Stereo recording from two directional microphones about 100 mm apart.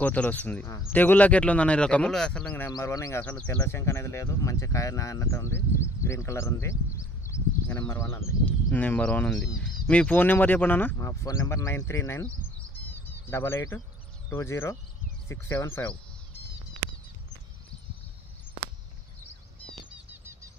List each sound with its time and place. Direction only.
0.0 s speech: 15° left (ahead or behind)
2.8 s speech: 30° left (ahead or behind)
3.2 s speech: 20° left (ahead or behind)
3.6 s speech: 25° left (ahead or behind)
7.2 s a sound: 25° left (ahead or behind)
7.9 s speech: 30° left (ahead or behind)
8.7 s speech: 20° left (ahead or behind)
11.0 s speech: 35° left (ahead or behind)
12.7 s bird: 20° left (ahead or behind)
14.3 s speech: 25° left (ahead or behind)